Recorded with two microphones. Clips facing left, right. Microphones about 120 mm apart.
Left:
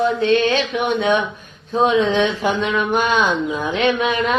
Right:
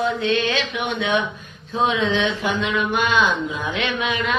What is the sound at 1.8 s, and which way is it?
Speech, 40° left (ahead or behind).